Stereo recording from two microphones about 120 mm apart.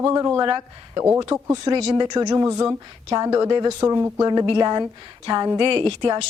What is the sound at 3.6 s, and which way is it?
Speech, 30° right (ahead or behind).